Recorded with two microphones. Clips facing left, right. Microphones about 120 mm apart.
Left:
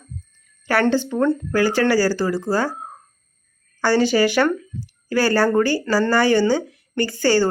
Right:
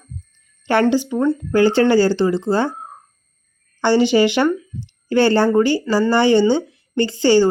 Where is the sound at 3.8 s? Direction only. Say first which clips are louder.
Right 3 dB; 20° right (ahead or behind).